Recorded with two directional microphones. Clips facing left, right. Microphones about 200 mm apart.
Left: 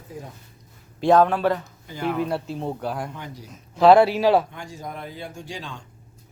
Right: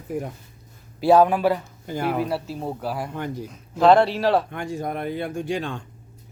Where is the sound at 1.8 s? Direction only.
50° right (ahead or behind).